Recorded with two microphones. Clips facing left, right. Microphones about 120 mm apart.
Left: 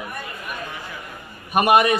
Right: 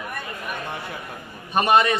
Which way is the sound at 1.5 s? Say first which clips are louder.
Left 2 dB; 15° left (ahead or behind).